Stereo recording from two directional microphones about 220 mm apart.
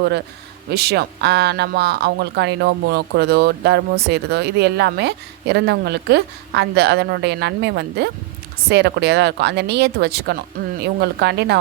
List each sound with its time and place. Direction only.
0.7 s speech: 45° right (ahead or behind)